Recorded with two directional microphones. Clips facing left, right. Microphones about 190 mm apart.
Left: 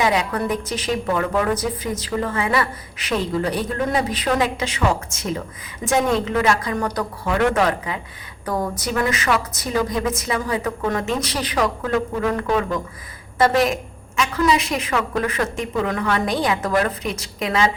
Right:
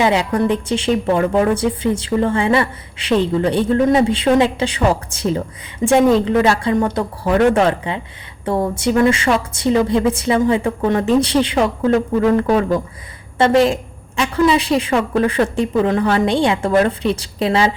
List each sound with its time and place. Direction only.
0.0 s a woman's voice: 30° right (ahead or behind)